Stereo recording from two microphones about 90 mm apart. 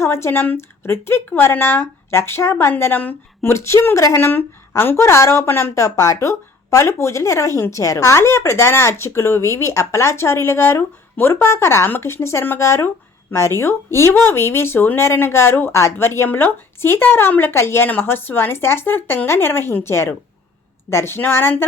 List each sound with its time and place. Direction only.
0.0 s a woman's voice: 30° left (ahead or behind)